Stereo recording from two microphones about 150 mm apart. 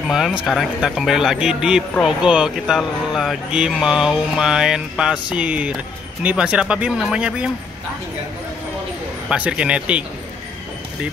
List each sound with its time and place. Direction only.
0.1 s speech: 5° right (ahead or behind)
9.3 s speech: 5° right (ahead or behind)